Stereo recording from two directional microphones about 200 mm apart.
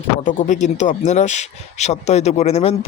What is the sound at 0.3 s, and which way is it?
Speech, 40° left (ahead or behind).